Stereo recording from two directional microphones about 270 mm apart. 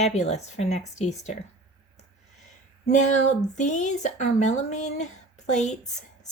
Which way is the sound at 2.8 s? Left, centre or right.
Left.